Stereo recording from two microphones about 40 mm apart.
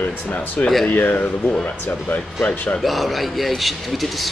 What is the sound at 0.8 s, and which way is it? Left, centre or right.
Speech, left.